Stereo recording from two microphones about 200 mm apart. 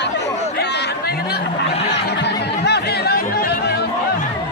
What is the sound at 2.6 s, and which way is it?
Chatter, 55° left (ahead or behind).